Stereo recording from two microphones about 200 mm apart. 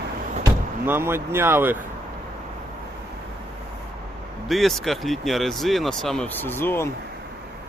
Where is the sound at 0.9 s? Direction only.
10° right (ahead or behind).